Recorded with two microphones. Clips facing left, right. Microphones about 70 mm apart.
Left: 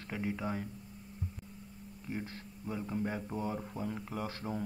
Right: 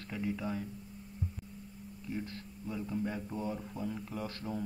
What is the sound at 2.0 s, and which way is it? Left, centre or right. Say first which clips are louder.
Speech: right 1 dB; left.